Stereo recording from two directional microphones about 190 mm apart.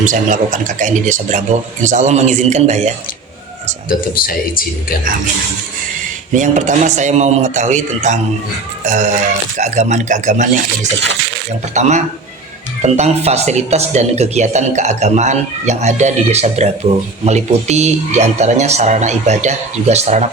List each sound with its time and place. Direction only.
0.0 s speech: 40° right (ahead or behind)
3.8 s speech: 50° left (ahead or behind)
6.3 s speech: 40° right (ahead or behind)
11.7 s speech: 40° right (ahead or behind)